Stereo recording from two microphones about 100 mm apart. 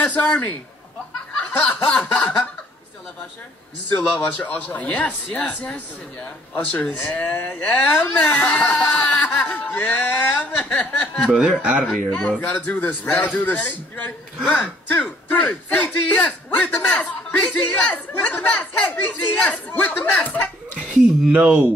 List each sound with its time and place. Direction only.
0.0 s speech: 15° left (ahead or behind)
1.6 s speech: 15° left (ahead or behind)
3.9 s speech: 15° left (ahead or behind)
21.3 s speech: 15° right (ahead or behind)